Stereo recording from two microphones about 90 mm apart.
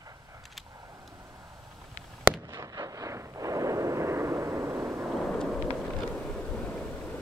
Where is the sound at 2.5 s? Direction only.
45° right (ahead or behind).